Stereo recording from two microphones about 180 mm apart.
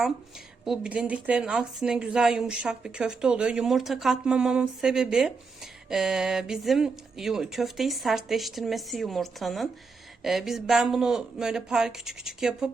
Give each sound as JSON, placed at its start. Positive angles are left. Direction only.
{"t": 0.6, "sound": "a woman's voice", "side_deg": -5}